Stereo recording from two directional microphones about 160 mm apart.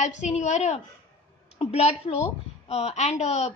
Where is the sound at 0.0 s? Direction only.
45° left (ahead or behind).